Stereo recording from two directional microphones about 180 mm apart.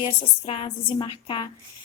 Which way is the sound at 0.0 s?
30° left (ahead or behind).